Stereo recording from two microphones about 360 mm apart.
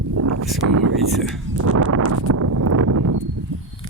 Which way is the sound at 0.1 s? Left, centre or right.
Right.